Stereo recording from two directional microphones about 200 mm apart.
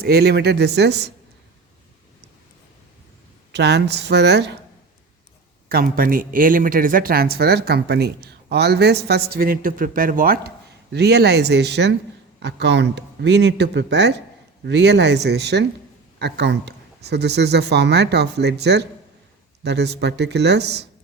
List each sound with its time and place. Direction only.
0.0 s speech: 55° right (ahead or behind)
3.5 s speech: 55° right (ahead or behind)
5.6 s speech: 45° right (ahead or behind)